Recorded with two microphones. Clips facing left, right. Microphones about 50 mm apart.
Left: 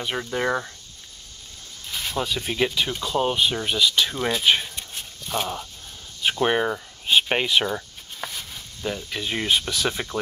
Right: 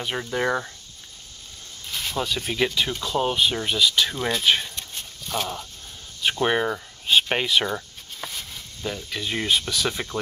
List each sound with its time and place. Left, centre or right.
0.0 s speech: centre
1.9 s speech: centre